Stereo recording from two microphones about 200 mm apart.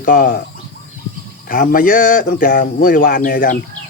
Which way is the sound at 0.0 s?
45° left (ahead or behind).